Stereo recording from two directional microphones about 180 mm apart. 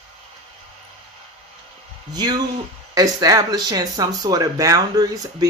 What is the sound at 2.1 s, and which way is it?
Speech, 20° right (ahead or behind).